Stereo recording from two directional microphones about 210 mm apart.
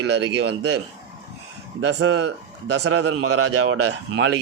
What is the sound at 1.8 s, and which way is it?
A man's voice, 85° right.